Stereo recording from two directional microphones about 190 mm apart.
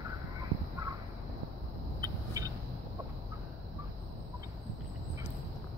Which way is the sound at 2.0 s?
20° right (ahead or behind).